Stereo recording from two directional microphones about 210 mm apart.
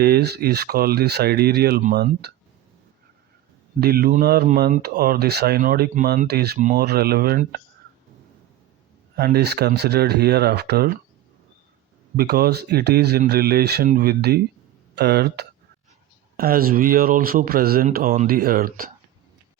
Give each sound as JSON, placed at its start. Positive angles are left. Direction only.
{"t": 0.0, "sound": "speech", "side_deg": -50}
{"t": 3.8, "sound": "speech", "side_deg": -45}
{"t": 9.1, "sound": "speech", "side_deg": -50}
{"t": 12.1, "sound": "speech", "side_deg": -50}